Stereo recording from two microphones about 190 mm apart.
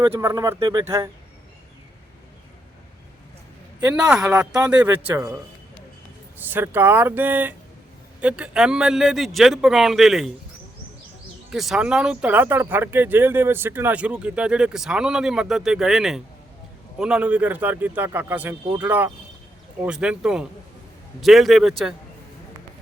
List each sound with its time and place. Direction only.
0.1 s a man's voice: 15° right (ahead or behind)
4.0 s a man's voice: 5° right (ahead or behind)
6.4 s a man's voice: 10° right (ahead or behind)
11.5 s a man's voice: centre (ahead or behind)